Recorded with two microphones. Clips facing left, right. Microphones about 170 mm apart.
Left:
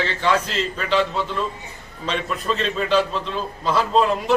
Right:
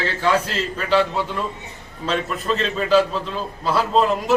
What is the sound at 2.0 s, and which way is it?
A man's voice, centre (ahead or behind).